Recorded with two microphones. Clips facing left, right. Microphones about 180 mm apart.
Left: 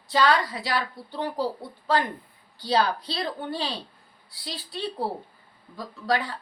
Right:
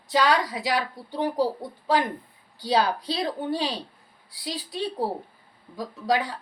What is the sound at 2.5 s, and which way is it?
Speech, 45° right (ahead or behind).